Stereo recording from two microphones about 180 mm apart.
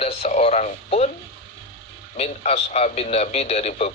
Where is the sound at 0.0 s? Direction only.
35° left (ahead or behind).